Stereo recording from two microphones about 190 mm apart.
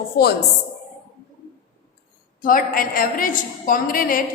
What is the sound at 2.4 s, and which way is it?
A woman's voice, 50° left (ahead or behind).